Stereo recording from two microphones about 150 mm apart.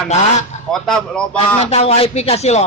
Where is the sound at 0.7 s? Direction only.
5° left (ahead or behind).